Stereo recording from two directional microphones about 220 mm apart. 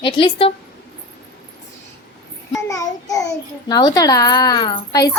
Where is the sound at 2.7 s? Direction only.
15° left (ahead or behind).